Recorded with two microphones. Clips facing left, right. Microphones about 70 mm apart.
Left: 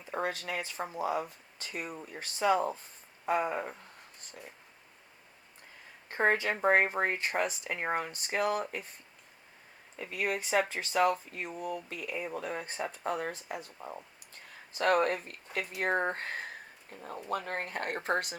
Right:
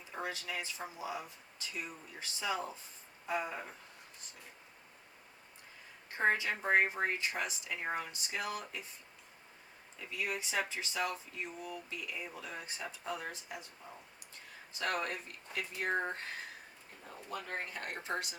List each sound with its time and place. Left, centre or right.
0.0 s speech: left
6.1 s speech: left
10.0 s speech: left